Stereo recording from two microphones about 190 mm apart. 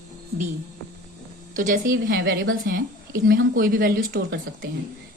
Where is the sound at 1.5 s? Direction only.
45° right (ahead or behind).